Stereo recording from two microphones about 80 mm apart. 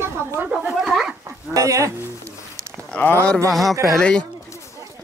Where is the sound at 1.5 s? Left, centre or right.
Right.